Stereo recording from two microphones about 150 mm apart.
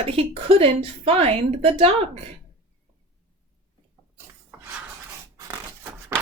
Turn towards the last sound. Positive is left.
turn(degrees=-20)  # may be behind; listen again after turning